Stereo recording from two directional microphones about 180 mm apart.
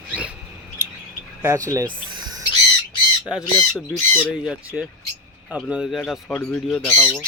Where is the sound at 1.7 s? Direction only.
20° right (ahead or behind).